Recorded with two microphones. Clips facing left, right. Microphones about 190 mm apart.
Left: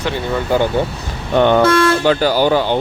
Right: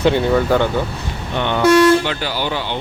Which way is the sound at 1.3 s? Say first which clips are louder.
Left 2 dB; 45° left (ahead or behind).